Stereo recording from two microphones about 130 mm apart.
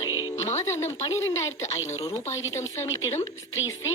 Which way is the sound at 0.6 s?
20° left (ahead or behind).